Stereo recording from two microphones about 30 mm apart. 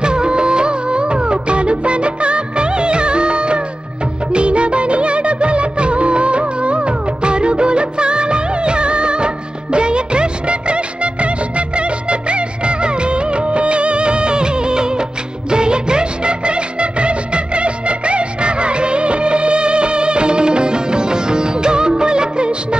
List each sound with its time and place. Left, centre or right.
0.0 s music of bollywood: right
15.5 s music: right